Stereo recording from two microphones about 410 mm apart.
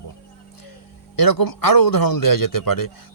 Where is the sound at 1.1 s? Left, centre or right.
Left.